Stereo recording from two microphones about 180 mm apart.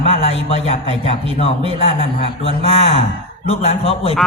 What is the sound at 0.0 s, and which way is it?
Speech, 35° left (ahead or behind).